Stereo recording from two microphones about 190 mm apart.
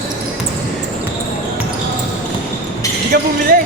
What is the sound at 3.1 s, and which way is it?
Speech, 55° right (ahead or behind).